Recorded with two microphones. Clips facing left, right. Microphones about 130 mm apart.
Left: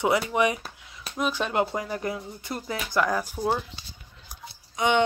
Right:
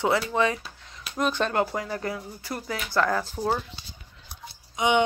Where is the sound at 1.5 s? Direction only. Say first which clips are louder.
Even; 20° left (ahead or behind).